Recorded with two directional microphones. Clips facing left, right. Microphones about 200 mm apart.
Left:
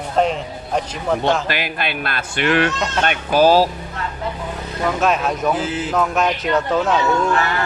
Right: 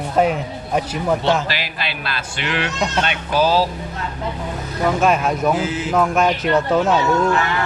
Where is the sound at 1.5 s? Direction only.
55° left (ahead or behind).